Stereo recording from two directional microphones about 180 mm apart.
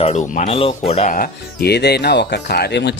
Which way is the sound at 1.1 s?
55° left (ahead or behind).